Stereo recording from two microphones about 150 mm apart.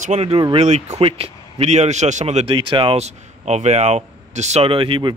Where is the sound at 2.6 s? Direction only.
35° right (ahead or behind).